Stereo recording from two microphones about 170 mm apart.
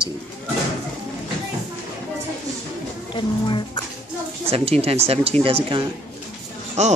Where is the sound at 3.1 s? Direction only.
30° left (ahead or behind).